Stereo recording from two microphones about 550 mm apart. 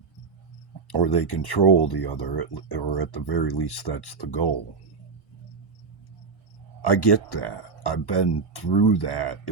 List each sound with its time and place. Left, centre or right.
0.9 s speech: left
6.8 s speech: left